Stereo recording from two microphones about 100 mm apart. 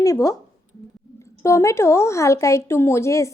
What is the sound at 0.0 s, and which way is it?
Speech, 35° left (ahead or behind).